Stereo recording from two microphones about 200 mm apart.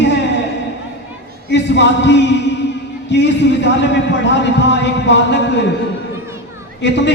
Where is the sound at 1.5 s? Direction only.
60° left (ahead or behind).